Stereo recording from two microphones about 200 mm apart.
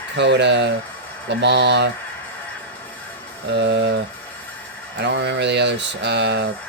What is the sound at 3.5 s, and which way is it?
Speech, 60° right (ahead or behind).